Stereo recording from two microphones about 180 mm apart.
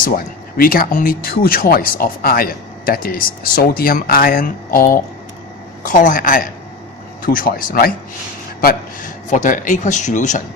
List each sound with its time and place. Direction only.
0.0 s speech: 55° left (ahead or behind)